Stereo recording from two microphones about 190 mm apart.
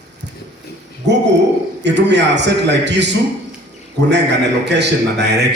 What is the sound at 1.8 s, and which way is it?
A man's voice, 65° right (ahead or behind).